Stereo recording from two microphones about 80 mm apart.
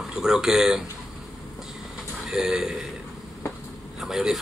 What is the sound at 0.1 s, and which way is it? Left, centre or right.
Speech, centre.